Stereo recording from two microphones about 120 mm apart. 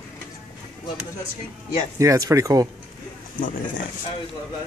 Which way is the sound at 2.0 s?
25° right (ahead or behind).